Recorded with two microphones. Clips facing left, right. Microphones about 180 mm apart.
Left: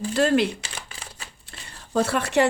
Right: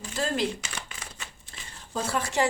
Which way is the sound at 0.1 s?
70° left (ahead or behind).